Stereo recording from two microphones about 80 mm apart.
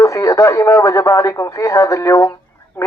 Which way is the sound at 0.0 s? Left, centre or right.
Left.